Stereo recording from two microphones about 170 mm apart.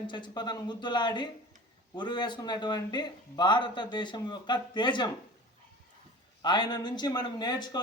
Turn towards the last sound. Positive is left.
turn(degrees=25)  # may be behind; listen again after turning